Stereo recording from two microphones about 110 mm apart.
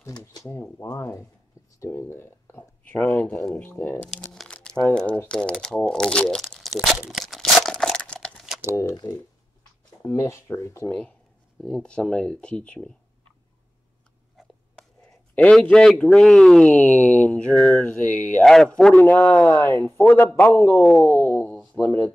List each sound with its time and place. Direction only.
0.5 s speech: 25° left (ahead or behind)
3.7 s speech: 25° left (ahead or behind)
4.0 s speech: 10° left (ahead or behind)
4.4 s crumpling: 5° left (ahead or behind)
10.0 s speech: 25° left (ahead or behind)
10.9 s speech: 10° left (ahead or behind)
15.3 s speech: 10° left (ahead or behind)
19.8 s speech: 15° left (ahead or behind)